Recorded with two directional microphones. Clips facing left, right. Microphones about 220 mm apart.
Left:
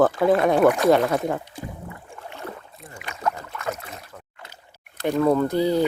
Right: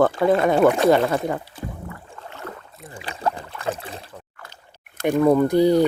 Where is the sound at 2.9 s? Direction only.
30° right (ahead or behind).